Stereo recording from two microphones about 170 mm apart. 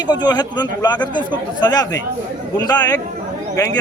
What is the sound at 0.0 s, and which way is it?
Speech, 25° left (ahead or behind).